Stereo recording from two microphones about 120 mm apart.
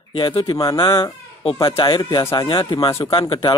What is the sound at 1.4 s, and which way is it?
Speech, 45° left (ahead or behind).